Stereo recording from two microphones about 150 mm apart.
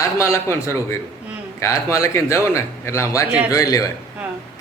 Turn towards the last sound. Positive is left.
turn(degrees=25)  # may be behind; listen again after turning